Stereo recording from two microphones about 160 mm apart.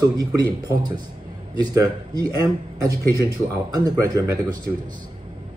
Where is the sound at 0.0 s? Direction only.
25° right (ahead or behind).